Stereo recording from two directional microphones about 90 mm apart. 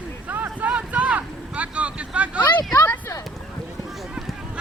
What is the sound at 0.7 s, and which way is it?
Vehicle, 15° right (ahead or behind).